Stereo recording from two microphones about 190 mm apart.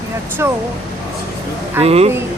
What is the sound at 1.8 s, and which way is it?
Speech, 30° right (ahead or behind).